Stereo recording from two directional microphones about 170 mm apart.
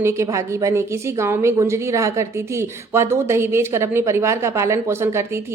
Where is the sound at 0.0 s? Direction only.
15° right (ahead or behind).